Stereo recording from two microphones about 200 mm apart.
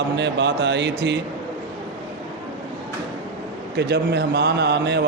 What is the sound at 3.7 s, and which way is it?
A man's voice, 55° right (ahead or behind).